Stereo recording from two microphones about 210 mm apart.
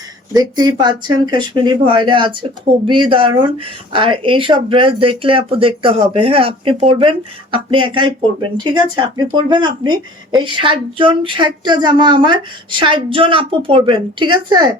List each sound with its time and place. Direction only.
0.3 s speech: 20° right (ahead or behind)